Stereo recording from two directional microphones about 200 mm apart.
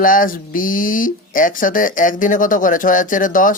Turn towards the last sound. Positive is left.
turn(degrees=40)  # may be behind; listen again after turning